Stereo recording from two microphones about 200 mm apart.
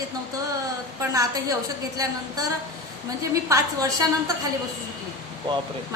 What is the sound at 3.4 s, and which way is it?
Speech, 15° right (ahead or behind).